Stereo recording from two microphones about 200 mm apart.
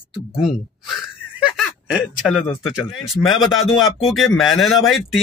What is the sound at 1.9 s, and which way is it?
Speech, centre (ahead or behind).